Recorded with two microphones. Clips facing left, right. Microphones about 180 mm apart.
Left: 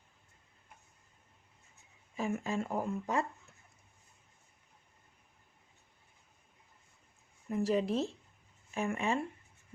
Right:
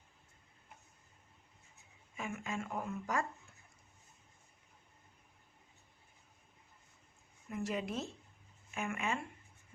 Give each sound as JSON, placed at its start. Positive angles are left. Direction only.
{"t": 2.1, "sound": "speech", "side_deg": 35}
{"t": 7.4, "sound": "speech", "side_deg": 35}